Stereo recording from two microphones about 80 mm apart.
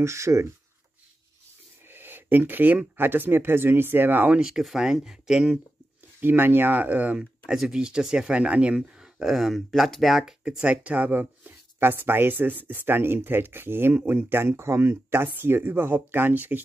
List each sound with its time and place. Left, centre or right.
0.0 s speech: right
1.9 s speech: right
4.4 s speech: centre
6.2 s speech: right